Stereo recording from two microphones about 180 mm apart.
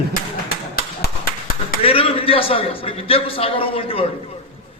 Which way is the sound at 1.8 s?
30° left (ahead or behind).